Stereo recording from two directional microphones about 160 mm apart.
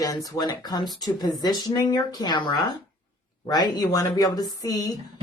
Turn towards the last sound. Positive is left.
turn(degrees=25)  # may be behind; listen again after turning